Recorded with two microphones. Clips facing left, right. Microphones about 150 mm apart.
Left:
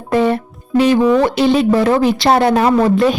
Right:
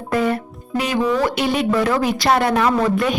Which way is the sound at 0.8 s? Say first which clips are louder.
Left 7 dB; 30° left (ahead or behind).